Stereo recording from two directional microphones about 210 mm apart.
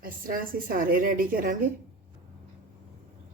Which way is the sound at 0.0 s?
40° right (ahead or behind).